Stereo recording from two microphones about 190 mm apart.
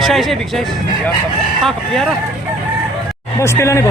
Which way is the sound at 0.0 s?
Centre (ahead or behind).